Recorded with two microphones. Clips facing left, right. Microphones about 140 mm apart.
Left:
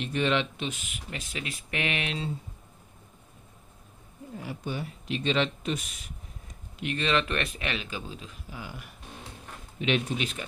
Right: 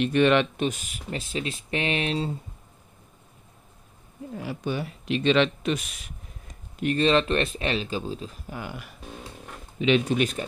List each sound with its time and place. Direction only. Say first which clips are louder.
0.0 s speech: right 7 dB; 65° right (ahead or behind); by 2.3 s 35° right (ahead or behind)
4.4 s speech: right 5 dB; 85° right
6.8 s speech: right 6 dB; 40° right (ahead or behind)
8.5 s speech: right 5 dB; 60° right (ahead or behind)
10.1 s speech: right 8 dB; 45° right (ahead or behind)